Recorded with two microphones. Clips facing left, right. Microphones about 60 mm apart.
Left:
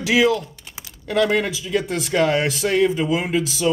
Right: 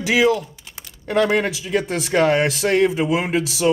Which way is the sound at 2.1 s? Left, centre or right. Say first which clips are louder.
Right 2 dB; right.